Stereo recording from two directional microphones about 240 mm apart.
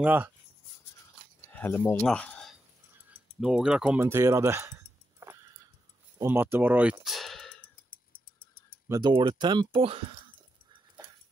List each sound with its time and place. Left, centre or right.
0.0 s speech: centre
1.5 s speech: centre
3.1 s a sound: centre
8.8 s speech: centre